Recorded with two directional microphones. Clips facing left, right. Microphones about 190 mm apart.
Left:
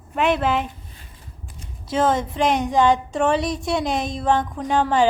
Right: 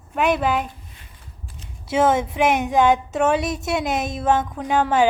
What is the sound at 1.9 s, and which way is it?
A woman's voice, 10° right (ahead or behind).